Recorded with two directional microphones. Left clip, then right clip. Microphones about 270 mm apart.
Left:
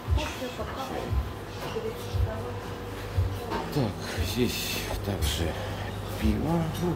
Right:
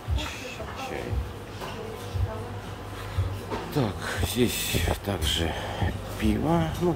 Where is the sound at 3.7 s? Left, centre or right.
Centre.